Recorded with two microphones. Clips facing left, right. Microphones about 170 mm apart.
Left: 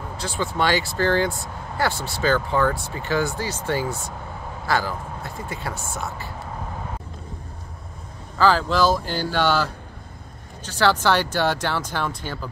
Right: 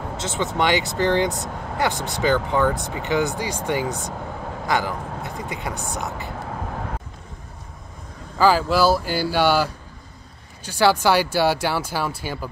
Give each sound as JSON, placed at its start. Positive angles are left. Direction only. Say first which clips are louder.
{"t": 0.2, "sound": "speech", "louder": "right 1 dB", "side_deg": -20}
{"t": 8.4, "sound": "speech", "louder": "right 1 dB", "side_deg": -10}